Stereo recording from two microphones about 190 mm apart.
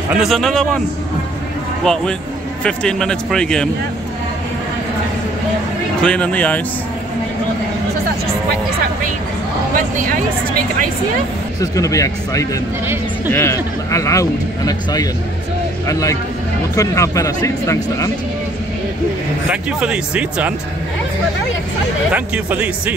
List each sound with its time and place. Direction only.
0.1 s speech: centre (ahead or behind)
1.9 s speech: 5° left (ahead or behind)
6.0 s speech: 5° left (ahead or behind)
9.8 s speech: 45° right (ahead or behind)
11.6 s speech: 15° left (ahead or behind)
12.8 s speech: 10° right (ahead or behind)
13.3 s a man's voice: 15° left (ahead or behind)
19.5 s speech: 5° right (ahead or behind)
22.1 s speech: 10° right (ahead or behind)